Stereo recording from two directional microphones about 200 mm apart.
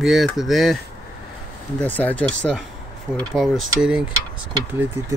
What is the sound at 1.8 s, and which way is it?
Speech, 10° left (ahead or behind).